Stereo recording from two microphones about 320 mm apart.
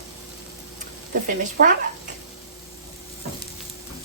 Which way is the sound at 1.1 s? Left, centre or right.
Right.